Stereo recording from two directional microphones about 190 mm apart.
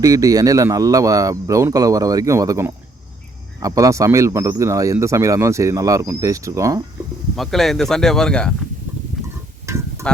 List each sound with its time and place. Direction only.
0.0 s speech: 20° right (ahead or behind)
7.3 s speech: centre (ahead or behind)
9.7 s a sound: 15° right (ahead or behind)